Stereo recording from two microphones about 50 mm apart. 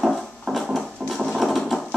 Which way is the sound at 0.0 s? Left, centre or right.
Centre.